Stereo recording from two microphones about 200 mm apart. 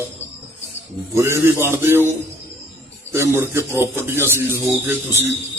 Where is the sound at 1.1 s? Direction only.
15° right (ahead or behind).